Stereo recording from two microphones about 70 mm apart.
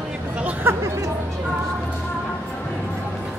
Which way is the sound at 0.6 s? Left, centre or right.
Right.